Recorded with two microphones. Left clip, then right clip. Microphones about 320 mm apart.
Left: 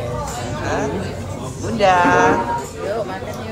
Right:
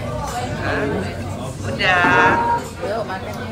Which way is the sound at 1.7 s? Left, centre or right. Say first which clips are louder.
Left 1 dB; centre.